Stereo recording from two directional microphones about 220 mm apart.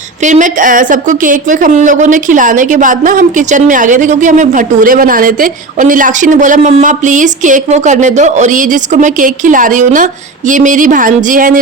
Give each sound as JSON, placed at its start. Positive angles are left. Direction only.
{"t": 0.2, "sound": "a woman's voice", "side_deg": -35}